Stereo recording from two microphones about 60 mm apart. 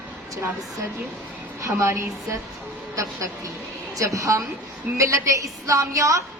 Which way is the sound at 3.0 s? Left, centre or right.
Right.